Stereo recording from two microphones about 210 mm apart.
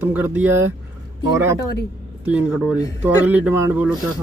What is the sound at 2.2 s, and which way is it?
Speech, 5° right (ahead or behind).